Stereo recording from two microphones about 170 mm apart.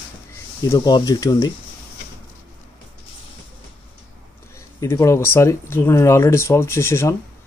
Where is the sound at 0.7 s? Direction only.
25° left (ahead or behind).